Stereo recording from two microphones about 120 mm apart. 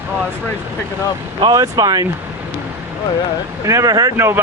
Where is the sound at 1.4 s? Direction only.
30° right (ahead or behind).